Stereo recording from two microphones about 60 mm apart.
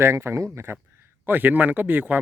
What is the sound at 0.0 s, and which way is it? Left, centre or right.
Speech, right.